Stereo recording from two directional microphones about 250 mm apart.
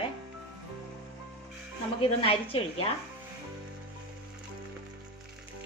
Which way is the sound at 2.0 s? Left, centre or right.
Left.